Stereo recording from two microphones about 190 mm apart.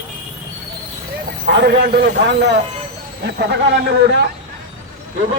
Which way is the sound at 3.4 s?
60° right (ahead or behind).